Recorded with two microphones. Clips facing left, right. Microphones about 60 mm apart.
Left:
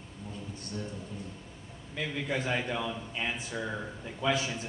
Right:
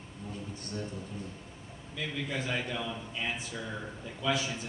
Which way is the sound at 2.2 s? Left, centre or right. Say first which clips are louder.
Left 4 dB; left.